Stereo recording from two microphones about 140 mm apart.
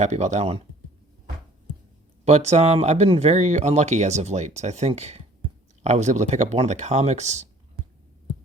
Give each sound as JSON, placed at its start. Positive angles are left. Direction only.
{"t": 0.0, "sound": "speech", "side_deg": -55}
{"t": 2.2, "sound": "speech", "side_deg": -50}